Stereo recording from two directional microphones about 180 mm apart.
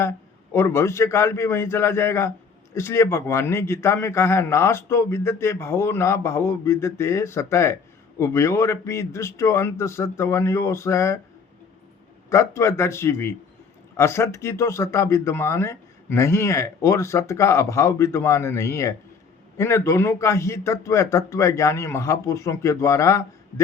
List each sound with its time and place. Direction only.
0.5 s a man's voice: 15° left (ahead or behind)
12.3 s a man's voice: 15° left (ahead or behind)